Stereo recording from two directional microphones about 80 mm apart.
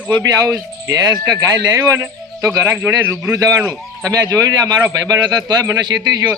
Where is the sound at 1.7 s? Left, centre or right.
Right.